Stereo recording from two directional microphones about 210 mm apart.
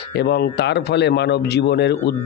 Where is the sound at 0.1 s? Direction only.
50° left (ahead or behind).